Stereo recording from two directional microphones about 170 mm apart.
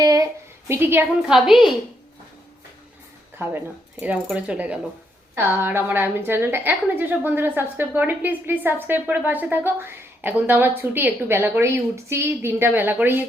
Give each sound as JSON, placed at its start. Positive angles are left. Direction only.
{"t": 0.0, "sound": "a sound", "side_deg": -20}
{"t": 0.7, "sound": "a woman's voice", "side_deg": -15}
{"t": 1.5, "sound": "a woman's voice", "side_deg": 0}
{"t": 3.3, "sound": "a woman's voice", "side_deg": -15}